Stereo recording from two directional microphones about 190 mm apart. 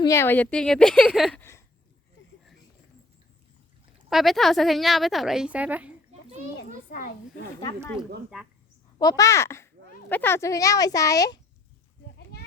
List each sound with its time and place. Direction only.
0.0 s a woman's voice: 15° left (ahead or behind)
1.4 s a sound: 15° left (ahead or behind)
4.1 s a woman's voice: centre (ahead or behind)
9.0 s speech: 20° left (ahead or behind)